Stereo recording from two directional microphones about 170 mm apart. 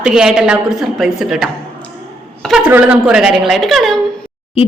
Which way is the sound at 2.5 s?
10° right (ahead or behind).